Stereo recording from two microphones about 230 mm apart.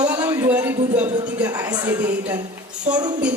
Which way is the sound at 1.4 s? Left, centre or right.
Centre.